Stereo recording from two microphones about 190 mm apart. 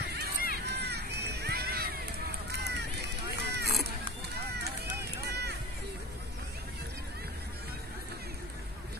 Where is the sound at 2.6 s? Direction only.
60° right (ahead or behind).